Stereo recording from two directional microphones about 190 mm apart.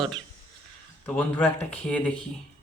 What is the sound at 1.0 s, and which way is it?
Speech, 5° left (ahead or behind).